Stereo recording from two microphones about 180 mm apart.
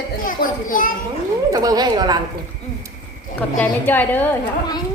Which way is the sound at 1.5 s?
20° right (ahead or behind).